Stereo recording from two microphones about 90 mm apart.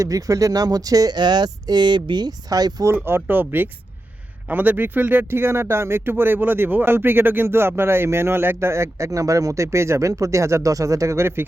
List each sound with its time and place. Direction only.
0.0 s speech: 40° right (ahead or behind)
2.8 s speech: 25° right (ahead or behind)